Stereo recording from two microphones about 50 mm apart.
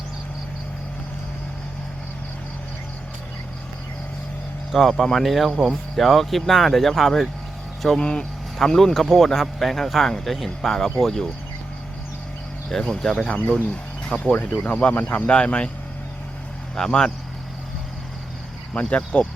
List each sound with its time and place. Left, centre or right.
4.7 s speech: centre
7.9 s speech: left
8.5 s speech: centre
12.8 s speech: centre
13.1 s speech: left
16.7 s speech: centre
18.7 s speech: left